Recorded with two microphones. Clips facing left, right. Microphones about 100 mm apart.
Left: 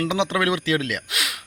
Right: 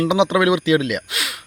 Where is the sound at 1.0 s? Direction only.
Centre (ahead or behind).